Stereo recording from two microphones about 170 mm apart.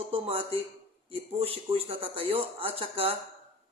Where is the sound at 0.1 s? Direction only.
35° right (ahead or behind).